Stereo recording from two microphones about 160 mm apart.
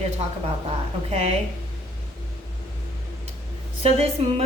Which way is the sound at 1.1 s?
40° right (ahead or behind).